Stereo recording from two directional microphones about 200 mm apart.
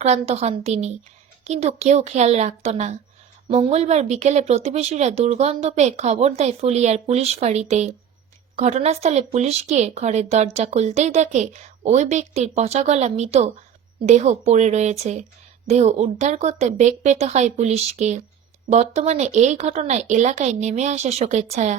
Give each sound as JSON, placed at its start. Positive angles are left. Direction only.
{"t": 0.0, "sound": "speech", "side_deg": -35}